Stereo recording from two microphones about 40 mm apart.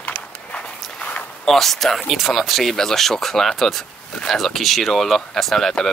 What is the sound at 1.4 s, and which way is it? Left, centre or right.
Speech, centre.